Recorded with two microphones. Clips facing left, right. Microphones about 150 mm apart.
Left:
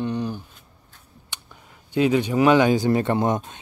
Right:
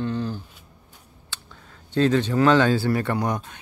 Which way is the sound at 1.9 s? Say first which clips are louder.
Even; 10° left (ahead or behind).